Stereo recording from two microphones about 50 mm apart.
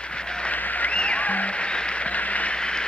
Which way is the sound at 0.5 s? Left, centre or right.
Left.